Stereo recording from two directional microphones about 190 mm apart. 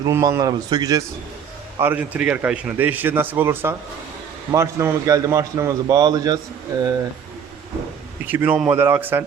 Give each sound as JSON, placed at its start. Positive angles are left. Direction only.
{"t": 0.0, "sound": "speech", "side_deg": -15}
{"t": 1.8, "sound": "a man's voice", "side_deg": -10}
{"t": 8.3, "sound": "a man's voice", "side_deg": -10}